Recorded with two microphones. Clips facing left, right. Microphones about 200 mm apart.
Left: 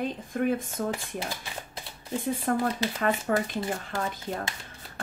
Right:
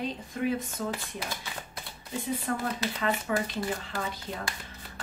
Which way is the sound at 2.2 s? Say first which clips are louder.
Left 4 dB; 50° left (ahead or behind).